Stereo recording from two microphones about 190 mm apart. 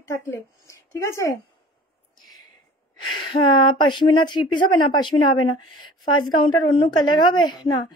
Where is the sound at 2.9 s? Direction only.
25° left (ahead or behind).